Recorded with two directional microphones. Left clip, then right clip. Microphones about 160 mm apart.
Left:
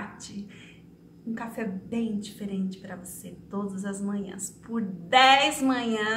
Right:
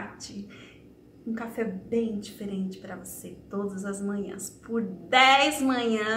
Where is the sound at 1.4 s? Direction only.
15° left (ahead or behind).